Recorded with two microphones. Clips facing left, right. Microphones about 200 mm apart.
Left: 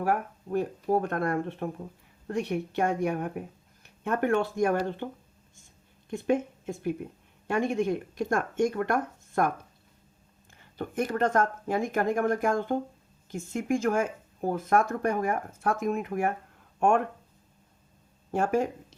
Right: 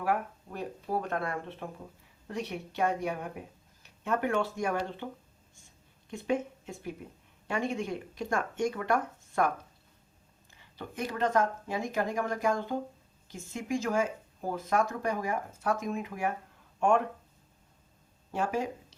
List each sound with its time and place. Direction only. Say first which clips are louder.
0.0 s speech: left 3 dB; 45° left (ahead or behind)
6.1 s speech: left 4 dB; 50° left (ahead or behind)
7.4 s speech: left 6 dB; 50° left (ahead or behind)
10.5 s speech: left 8 dB; 50° left (ahead or behind)
18.3 s speech: left 5 dB; 50° left (ahead or behind)